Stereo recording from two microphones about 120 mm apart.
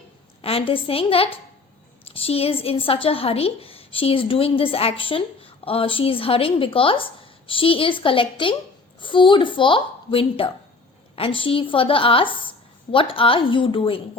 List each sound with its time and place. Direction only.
0.4 s a woman's voice: 50° left (ahead or behind)